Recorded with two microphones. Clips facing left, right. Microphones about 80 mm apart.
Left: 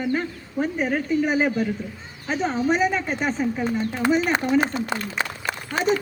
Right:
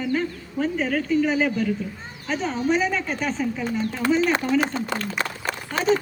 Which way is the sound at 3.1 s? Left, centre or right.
Left.